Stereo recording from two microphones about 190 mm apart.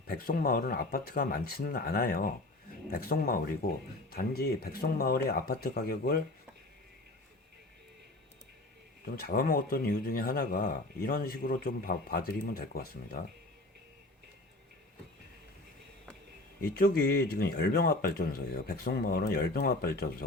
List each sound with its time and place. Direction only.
0.1 s speech: 50° left (ahead or behind)
9.0 s speech: 50° left (ahead or behind)
16.6 s speech: 50° left (ahead or behind)